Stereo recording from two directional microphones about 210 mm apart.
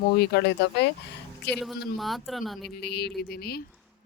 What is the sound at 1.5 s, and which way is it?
A man's voice, centre (ahead or behind).